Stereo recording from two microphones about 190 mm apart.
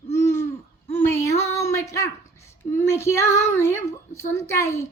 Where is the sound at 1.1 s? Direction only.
15° left (ahead or behind).